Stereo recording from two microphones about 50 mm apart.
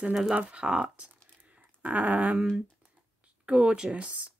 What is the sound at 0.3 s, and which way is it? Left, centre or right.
Speech, right.